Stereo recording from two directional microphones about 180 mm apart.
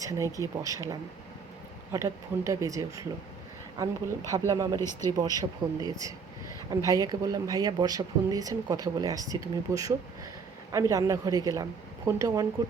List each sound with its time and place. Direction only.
0.0 s speech: 20° right (ahead or behind)
4.3 s speech: 20° right (ahead or behind)
4.8 s speech: 15° left (ahead or behind)
5.1 s speech: 20° right (ahead or behind)